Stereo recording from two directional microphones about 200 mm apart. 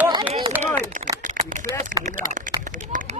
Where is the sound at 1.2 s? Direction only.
40° right (ahead or behind).